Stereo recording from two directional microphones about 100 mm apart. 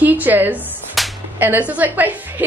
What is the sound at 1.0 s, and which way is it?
Whip, centre (ahead or behind).